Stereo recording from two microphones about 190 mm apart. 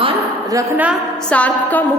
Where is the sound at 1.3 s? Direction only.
10° left (ahead or behind).